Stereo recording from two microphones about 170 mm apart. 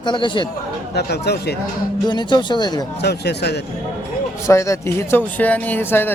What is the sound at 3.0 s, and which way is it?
Speech, 75° left (ahead or behind).